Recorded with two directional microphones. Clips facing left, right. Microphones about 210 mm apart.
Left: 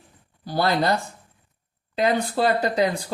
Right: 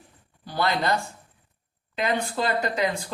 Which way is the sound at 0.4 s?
35° left (ahead or behind).